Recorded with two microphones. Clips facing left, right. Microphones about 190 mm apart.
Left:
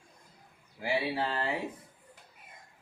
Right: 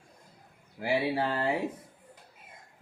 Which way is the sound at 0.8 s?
50° right (ahead or behind).